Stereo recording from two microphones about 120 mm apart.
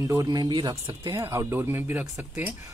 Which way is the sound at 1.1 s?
25° right (ahead or behind).